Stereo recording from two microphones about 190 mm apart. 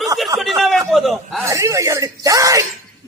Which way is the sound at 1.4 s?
15° right (ahead or behind).